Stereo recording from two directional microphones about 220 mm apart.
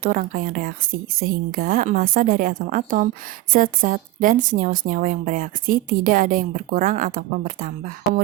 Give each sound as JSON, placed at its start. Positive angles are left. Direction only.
{"t": 0.0, "sound": "a woman's voice", "side_deg": -40}